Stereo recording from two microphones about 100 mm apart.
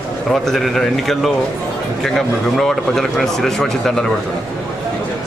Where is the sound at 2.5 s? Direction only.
5° left (ahead or behind).